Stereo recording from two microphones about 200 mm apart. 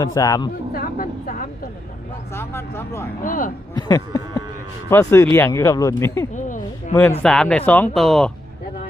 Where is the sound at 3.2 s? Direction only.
40° left (ahead or behind).